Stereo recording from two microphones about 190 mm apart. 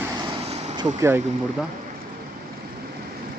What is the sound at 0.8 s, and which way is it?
Speech, 15° right (ahead or behind).